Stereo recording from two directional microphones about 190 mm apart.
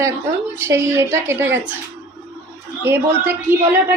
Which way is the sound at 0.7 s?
15° right (ahead or behind).